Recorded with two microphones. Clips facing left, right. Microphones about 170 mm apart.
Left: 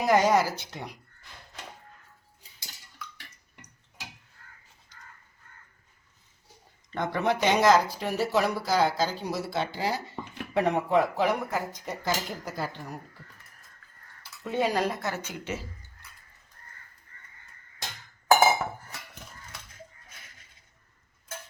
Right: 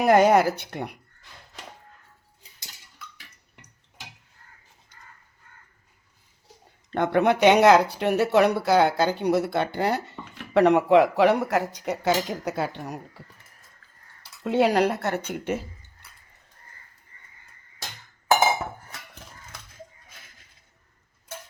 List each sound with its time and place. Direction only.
0.0 s speech: 60° right (ahead or behind)
6.9 s speech: 65° right (ahead or behind)
14.4 s speech: 70° right (ahead or behind); by 15.6 s 55° right (ahead or behind)